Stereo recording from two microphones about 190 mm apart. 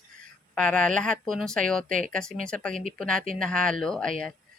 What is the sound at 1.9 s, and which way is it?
Speech, 45° right (ahead or behind).